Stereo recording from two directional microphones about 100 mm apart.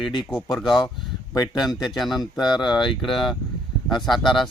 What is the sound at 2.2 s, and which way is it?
Speech, 45° left (ahead or behind).